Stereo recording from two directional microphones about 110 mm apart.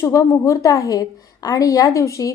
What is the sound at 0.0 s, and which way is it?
A woman's voice, 30° left (ahead or behind).